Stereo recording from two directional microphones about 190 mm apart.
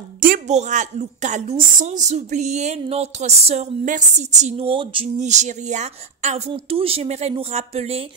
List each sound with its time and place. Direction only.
0.2 s a woman's voice: 40° right (ahead or behind)